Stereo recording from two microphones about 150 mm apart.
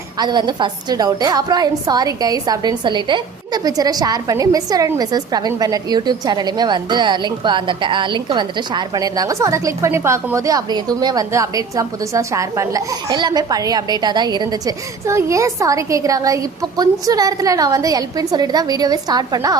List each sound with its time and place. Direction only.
0.2 s a woman's voice: 30° right (ahead or behind)